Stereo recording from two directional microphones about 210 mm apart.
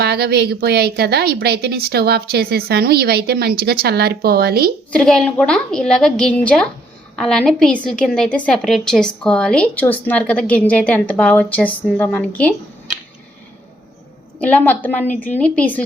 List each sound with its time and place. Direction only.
0.0 s a woman's voice: 50° right (ahead or behind)
4.9 s a woman's voice: 5° left (ahead or behind)
14.3 s a woman's voice: 5° left (ahead or behind)